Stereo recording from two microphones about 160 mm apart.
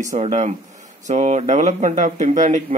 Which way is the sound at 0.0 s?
45° right (ahead or behind).